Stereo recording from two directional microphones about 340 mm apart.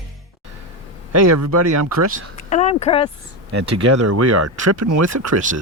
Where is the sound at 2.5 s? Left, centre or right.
Centre.